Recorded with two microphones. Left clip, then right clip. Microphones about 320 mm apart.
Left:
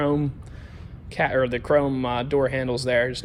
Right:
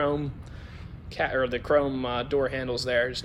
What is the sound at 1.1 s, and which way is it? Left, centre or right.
Speech, centre.